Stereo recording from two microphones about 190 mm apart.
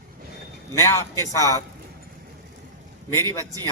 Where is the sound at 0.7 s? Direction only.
15° left (ahead or behind).